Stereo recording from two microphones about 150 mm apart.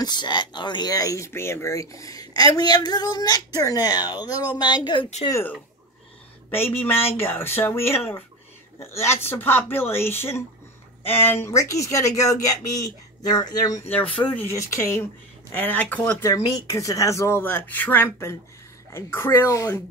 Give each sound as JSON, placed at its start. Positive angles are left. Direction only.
{"t": 0.0, "sound": "speech", "side_deg": 30}
{"t": 5.3, "sound": "speech", "side_deg": 10}
{"t": 13.8, "sound": "speech", "side_deg": 10}